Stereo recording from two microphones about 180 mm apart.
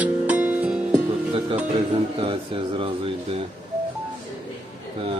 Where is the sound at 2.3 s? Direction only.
30° right (ahead or behind).